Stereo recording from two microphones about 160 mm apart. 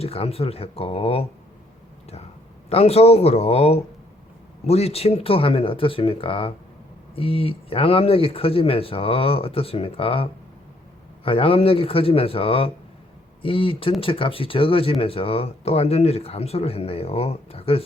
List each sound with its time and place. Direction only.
0.0 s speech: 40° left (ahead or behind)
2.6 s speech: 40° left (ahead or behind)